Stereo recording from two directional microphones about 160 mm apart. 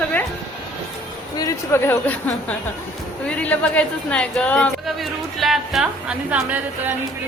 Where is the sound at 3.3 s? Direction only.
10° left (ahead or behind); by 6.9 s 10° right (ahead or behind).